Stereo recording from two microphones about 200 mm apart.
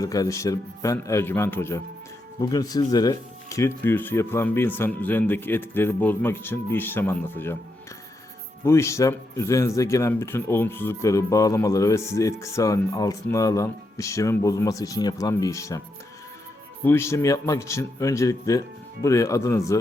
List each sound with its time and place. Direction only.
0.0 s speech: 15° left (ahead or behind)
8.6 s speech: 15° left (ahead or behind)
16.8 s speech: 10° left (ahead or behind)